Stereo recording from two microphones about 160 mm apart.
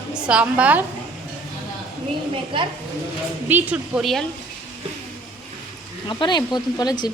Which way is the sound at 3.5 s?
10° right (ahead or behind).